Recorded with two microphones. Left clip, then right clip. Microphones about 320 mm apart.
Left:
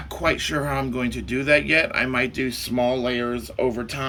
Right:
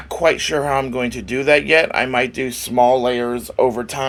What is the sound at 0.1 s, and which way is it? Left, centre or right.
Speech, centre.